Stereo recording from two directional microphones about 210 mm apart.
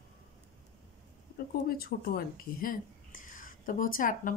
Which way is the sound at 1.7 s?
45° left (ahead or behind).